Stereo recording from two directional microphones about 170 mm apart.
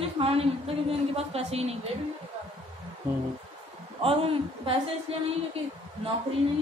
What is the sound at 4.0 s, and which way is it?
A woman's voice, 35° right (ahead or behind).